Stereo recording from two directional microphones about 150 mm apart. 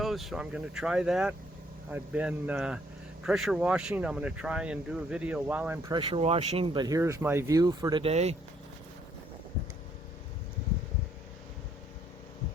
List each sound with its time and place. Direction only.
0.0 s speech: centre (ahead or behind)
5.9 s speech: 30° right (ahead or behind)
6.1 s speech: 45° right (ahead or behind)
6.8 s speech: 20° right (ahead or behind)
8.0 s speech: 45° right (ahead or behind)